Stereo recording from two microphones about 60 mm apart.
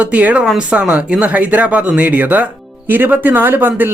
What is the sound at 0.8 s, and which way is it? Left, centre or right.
Speech, right.